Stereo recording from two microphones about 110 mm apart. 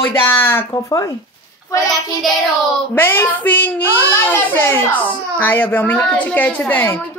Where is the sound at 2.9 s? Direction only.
20° left (ahead or behind).